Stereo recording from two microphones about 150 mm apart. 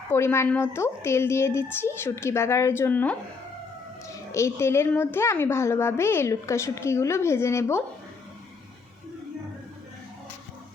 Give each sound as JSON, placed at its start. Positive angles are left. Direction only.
{"t": 0.1, "sound": "a woman's voice", "side_deg": 15}